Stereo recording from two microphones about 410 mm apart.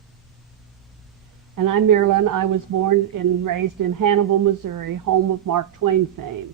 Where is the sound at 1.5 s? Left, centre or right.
Right.